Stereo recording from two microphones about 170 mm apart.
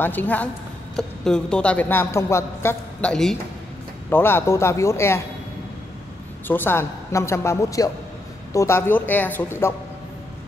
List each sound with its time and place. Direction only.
0.0 s a woman's voice: 10° left (ahead or behind)
6.4 s a woman's voice: 10° left (ahead or behind)